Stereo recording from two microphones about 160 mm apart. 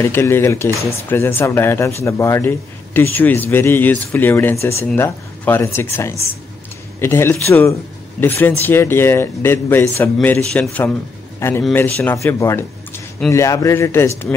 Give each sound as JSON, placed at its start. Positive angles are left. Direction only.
{"t": 0.0, "sound": "a man's voice", "side_deg": 15}